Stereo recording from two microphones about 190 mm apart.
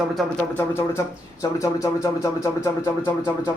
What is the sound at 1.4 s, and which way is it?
Speech, 15° left (ahead or behind).